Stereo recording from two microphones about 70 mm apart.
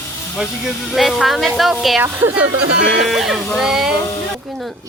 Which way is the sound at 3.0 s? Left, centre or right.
Centre.